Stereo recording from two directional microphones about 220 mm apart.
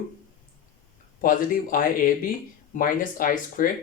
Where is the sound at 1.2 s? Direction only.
40° left (ahead or behind).